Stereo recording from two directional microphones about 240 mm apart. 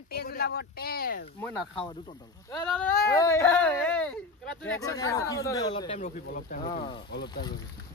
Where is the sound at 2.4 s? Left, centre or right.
Centre.